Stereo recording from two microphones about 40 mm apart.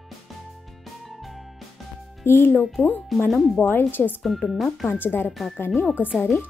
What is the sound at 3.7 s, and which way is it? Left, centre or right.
Speech, left.